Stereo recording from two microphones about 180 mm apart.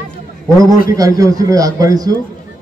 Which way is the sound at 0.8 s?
20° right (ahead or behind).